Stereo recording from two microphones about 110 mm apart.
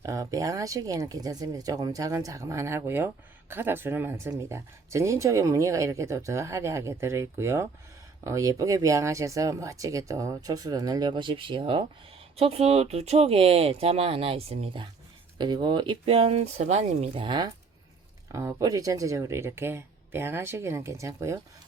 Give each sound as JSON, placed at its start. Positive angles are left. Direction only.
{"t": 0.0, "sound": "speech", "side_deg": -30}
{"t": 12.4, "sound": "speech", "side_deg": -70}
{"t": 15.4, "sound": "speech", "side_deg": -45}
{"t": 17.2, "sound": "speech", "side_deg": -45}
{"t": 18.3, "sound": "speech", "side_deg": -25}